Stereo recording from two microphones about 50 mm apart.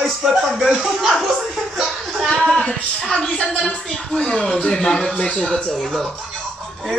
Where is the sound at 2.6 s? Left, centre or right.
Centre.